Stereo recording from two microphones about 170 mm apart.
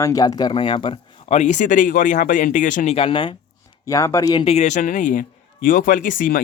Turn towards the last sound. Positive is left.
turn(degrees=55)  # may be behind; listen again after turning